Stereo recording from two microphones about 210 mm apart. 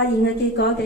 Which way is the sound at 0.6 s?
55° left (ahead or behind).